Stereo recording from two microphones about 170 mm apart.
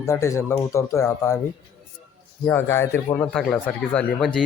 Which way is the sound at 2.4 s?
10° left (ahead or behind).